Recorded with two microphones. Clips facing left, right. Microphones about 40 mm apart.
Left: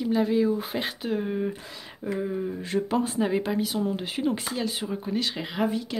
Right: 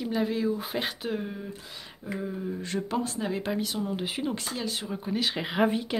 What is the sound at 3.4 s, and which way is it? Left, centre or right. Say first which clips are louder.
Speech: left 3 dB; centre.